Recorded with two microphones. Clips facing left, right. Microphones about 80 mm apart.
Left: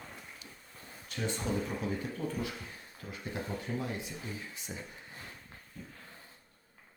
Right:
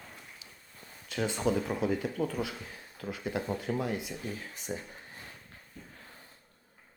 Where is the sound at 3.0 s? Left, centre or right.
Right.